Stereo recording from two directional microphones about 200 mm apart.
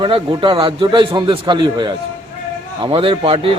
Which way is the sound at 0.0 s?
25° right (ahead or behind).